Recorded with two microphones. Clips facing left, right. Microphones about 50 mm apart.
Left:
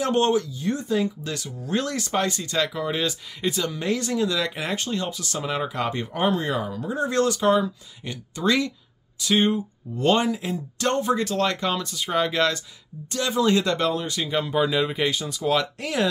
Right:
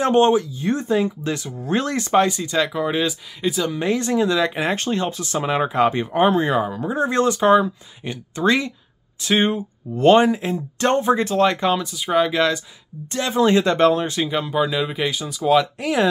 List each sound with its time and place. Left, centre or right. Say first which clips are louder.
0.1 s speech: right 5 dB; right
2.2 s speech: right 4 dB; centre
3.3 s speech: right 4 dB; centre
3.7 s speech: right 5 dB; right
4.7 s speech: right 5 dB; right
5.2 s speech: right 6 dB; right; by 12.6 s centre
13.1 s speech: right 4 dB; right
14.3 s speech: left 1 dB; centre